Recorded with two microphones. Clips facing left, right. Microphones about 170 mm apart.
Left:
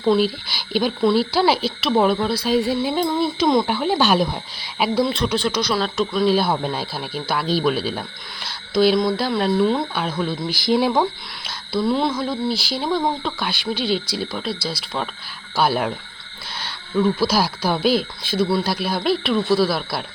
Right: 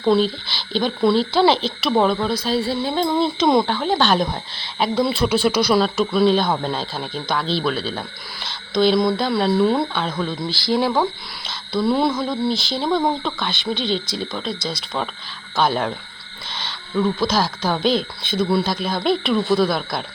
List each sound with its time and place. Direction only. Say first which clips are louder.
0.2 s speech: even; 10° left (ahead or behind)
3.4 s speech: right 1 dB; 5° right (ahead or behind)
3.7 s speech: even; 10° left (ahead or behind)
5.0 s speech: right 3 dB; 5° right (ahead or behind)
6.2 s speech: left 1 dB; 10° left (ahead or behind)
9.9 s speech: even; 10° left (ahead or behind)
11.4 s speech: right 1 dB; centre (ahead or behind)